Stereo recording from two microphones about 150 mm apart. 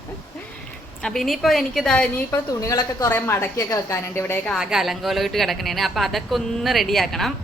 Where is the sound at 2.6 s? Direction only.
20° left (ahead or behind).